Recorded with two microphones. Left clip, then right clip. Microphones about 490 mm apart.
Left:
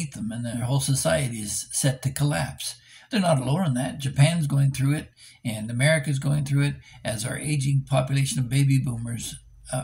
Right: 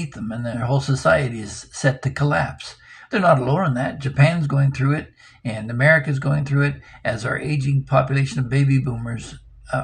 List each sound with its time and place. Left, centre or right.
0.0 s speech: left